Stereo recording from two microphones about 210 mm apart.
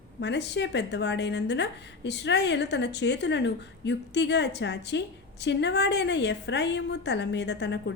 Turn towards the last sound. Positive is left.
turn(degrees=55)  # may be behind; listen again after turning